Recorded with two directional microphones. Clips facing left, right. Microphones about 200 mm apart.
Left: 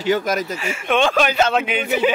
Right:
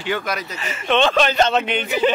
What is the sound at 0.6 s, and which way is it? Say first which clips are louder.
Speech: right 4 dB; 10° left (ahead or behind).